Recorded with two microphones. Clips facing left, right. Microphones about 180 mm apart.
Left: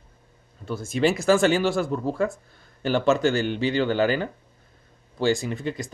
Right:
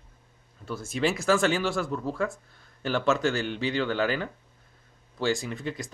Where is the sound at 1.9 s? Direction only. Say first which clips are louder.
Left 4 dB; 30° left (ahead or behind).